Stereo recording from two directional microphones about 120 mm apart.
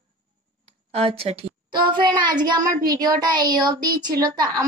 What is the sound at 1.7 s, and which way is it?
A child's voice, 40° right (ahead or behind).